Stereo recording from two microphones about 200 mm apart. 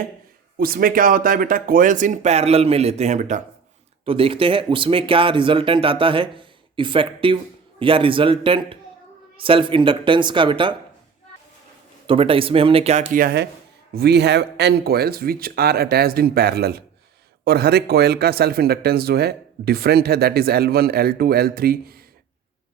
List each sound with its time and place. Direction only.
0.5 s speech: 45° right (ahead or behind)
4.0 s speech: 25° right (ahead or behind)
12.0 s speech: 25° right (ahead or behind)
13.2 s a man's voice: 55° right (ahead or behind)